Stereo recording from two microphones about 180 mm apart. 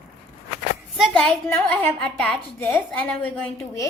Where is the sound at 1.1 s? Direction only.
10° left (ahead or behind).